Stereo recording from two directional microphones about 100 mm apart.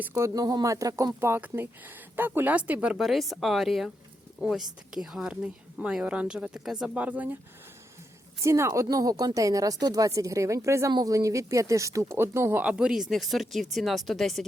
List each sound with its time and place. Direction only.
0.0 s speech: 25° right (ahead or behind)
0.3 s a woman's voice: 35° right (ahead or behind); by 3.0 s 15° right (ahead or behind)
3.0 s a woman's voice: centre (ahead or behind)
8.4 s a woman's voice: 30° right (ahead or behind)
12.6 s speech: 10° right (ahead or behind)